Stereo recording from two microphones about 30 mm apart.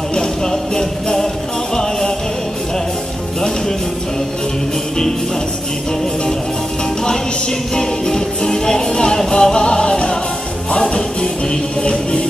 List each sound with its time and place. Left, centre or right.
0.1 s music: centre
7.7 s music: centre
11.9 s music: left